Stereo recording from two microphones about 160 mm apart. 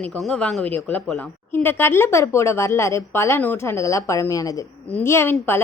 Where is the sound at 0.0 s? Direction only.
5° left (ahead or behind).